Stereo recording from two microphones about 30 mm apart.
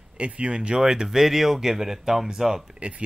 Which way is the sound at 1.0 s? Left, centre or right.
Centre.